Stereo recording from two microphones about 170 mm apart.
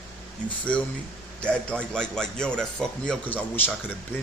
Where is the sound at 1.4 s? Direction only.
5° left (ahead or behind).